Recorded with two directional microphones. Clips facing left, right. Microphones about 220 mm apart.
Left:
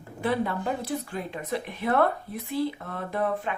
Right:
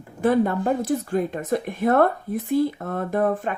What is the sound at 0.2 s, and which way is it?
Speech, 45° right (ahead or behind).